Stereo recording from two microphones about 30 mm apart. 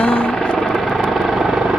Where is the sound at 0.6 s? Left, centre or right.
Centre.